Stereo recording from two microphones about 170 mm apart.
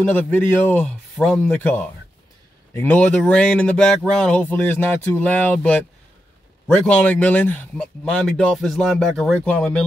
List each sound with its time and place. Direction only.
0.0 s speech: 10° left (ahead or behind)